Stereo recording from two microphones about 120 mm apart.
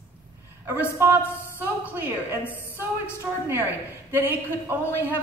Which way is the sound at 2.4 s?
20° left (ahead or behind).